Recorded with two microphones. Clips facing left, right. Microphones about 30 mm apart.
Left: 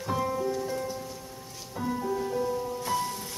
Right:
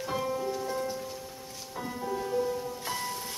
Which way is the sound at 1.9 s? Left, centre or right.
Centre.